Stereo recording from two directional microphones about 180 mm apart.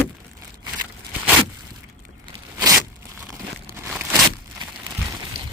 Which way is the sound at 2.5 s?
20° right (ahead or behind).